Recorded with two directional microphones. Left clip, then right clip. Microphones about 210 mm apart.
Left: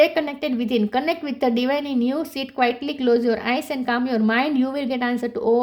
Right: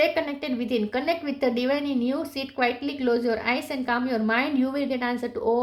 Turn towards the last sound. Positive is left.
turn(degrees=35)  # may be behind; listen again after turning